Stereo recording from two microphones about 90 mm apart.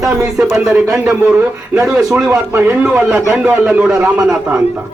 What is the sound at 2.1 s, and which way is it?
Speech, 25° right (ahead or behind).